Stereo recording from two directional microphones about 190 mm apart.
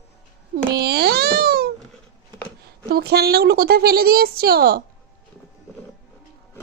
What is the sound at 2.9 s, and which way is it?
A woman's voice, 55° right (ahead or behind).